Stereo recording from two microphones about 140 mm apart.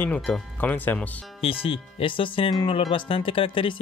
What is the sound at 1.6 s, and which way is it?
Speech, 40° left (ahead or behind).